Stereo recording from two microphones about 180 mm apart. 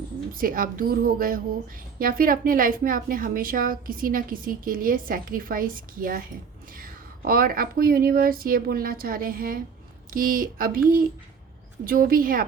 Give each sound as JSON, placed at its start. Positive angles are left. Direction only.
{"t": 0.3, "sound": "a woman's voice", "side_deg": -50}